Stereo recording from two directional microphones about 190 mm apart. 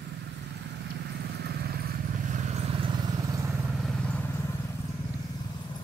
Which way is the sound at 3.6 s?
Centre (ahead or behind).